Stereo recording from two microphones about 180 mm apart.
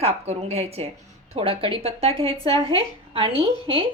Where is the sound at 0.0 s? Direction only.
35° right (ahead or behind).